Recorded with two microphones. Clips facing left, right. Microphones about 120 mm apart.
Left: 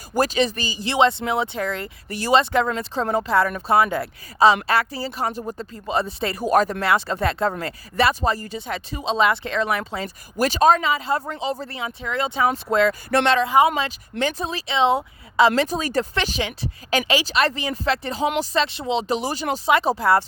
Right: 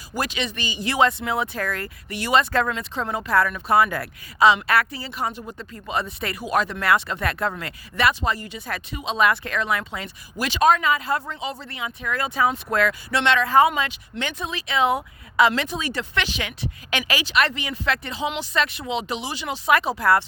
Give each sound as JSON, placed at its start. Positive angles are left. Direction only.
{"t": 0.1, "sound": "speech", "side_deg": 40}
{"t": 2.0, "sound": "speech", "side_deg": 35}
{"t": 12.9, "sound": "speech", "side_deg": 45}
{"t": 13.4, "sound": "speech", "side_deg": 15}
{"t": 13.7, "sound": "speech", "side_deg": 35}
{"t": 18.6, "sound": "speech", "side_deg": 30}